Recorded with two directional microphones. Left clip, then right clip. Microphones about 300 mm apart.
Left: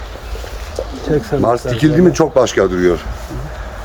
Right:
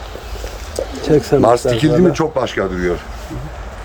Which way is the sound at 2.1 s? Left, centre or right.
Centre.